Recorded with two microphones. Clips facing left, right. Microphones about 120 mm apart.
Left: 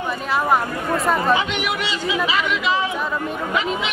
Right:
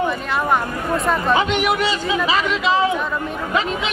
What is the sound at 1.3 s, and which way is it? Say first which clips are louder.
Speech: right 3 dB; 45° right (ahead or behind).